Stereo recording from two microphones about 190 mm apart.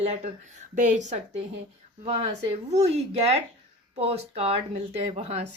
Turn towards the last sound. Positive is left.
turn(degrees=-35)  # may be behind; listen again after turning